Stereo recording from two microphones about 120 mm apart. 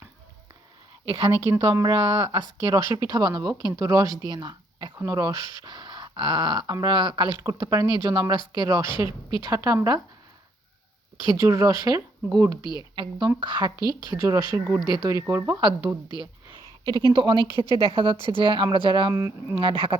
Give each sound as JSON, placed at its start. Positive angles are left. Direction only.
{"t": 1.0, "sound": "speech", "side_deg": -45}
{"t": 1.5, "sound": "speech", "side_deg": -25}
{"t": 4.3, "sound": "a sound", "side_deg": -35}
{"t": 5.0, "sound": "speech", "side_deg": -30}
{"t": 8.9, "sound": "speech", "side_deg": 45}
{"t": 9.4, "sound": "speech", "side_deg": -35}
{"t": 11.3, "sound": "speech", "side_deg": -30}
{"t": 16.2, "sound": "a sound", "side_deg": -35}
{"t": 17.1, "sound": "speech", "side_deg": -40}
{"t": 19.1, "sound": "speech", "side_deg": -25}
{"t": 19.5, "sound": "speech", "side_deg": -45}